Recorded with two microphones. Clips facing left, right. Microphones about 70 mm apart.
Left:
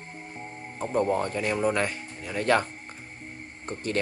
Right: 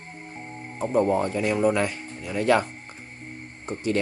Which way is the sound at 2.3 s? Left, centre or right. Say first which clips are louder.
Right 3 dB; left.